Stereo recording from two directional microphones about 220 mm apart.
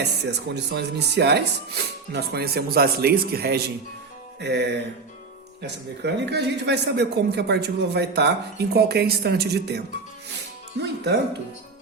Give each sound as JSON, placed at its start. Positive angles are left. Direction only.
{"t": 0.0, "sound": "a man's voice", "side_deg": -50}
{"t": 6.0, "sound": "a man's voice", "side_deg": -50}